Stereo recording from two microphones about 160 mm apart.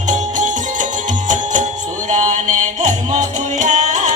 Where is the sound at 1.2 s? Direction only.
50° right (ahead or behind).